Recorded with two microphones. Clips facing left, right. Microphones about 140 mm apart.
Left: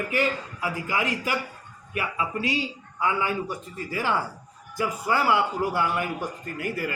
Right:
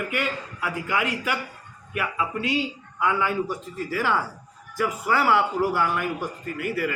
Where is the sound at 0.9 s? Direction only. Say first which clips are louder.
Right 2 dB; 35° left (ahead or behind).